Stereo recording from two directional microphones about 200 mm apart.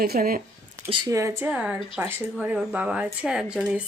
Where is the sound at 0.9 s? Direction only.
15° right (ahead or behind).